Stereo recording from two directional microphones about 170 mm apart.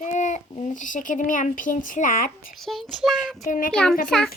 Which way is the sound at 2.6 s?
Centre (ahead or behind).